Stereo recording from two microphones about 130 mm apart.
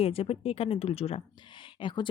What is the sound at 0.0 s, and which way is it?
Speech, 50° left (ahead or behind).